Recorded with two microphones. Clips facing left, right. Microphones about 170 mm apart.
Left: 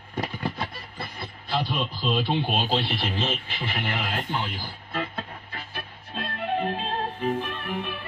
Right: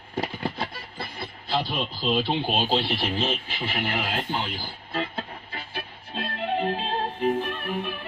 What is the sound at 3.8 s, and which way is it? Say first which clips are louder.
Music: right 2 dB; 30° right (ahead or behind).